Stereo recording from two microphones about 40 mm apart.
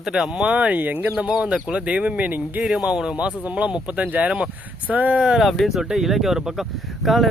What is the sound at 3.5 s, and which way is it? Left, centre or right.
Speech, right.